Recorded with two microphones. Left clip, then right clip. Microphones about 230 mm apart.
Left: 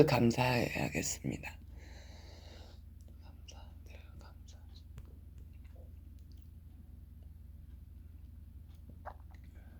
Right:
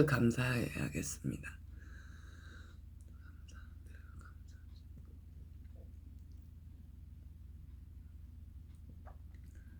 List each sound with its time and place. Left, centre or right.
0.0 s speech: right
1.8 s snort: right
3.4 s whispering: right